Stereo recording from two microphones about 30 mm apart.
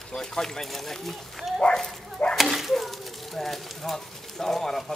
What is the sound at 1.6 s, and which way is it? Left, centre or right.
Speech, left.